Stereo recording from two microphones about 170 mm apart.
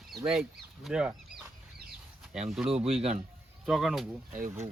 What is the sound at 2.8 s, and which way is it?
Speech, 35° right (ahead or behind).